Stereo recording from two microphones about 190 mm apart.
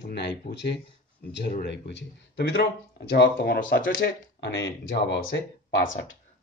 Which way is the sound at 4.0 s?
70° left (ahead or behind).